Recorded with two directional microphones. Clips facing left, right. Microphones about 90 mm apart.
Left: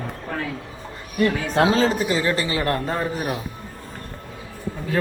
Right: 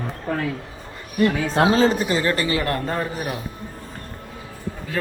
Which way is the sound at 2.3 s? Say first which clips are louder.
Even; 25° left (ahead or behind).